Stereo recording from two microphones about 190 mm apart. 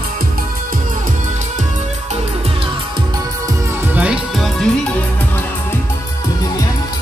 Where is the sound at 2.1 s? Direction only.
30° right (ahead or behind).